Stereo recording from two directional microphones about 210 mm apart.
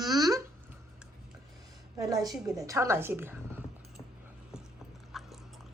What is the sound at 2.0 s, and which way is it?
A woman's voice, 15° right (ahead or behind).